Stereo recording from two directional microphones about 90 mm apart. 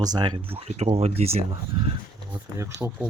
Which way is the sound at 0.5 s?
90° right.